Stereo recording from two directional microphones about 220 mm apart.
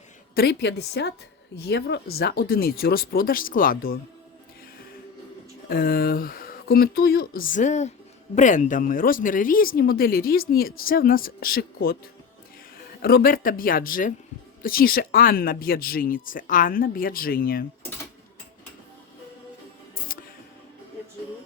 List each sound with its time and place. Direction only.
0.3 s speech: 50° left (ahead or behind)
5.6 s speech: 40° left (ahead or behind)
13.0 s speech: 45° left (ahead or behind)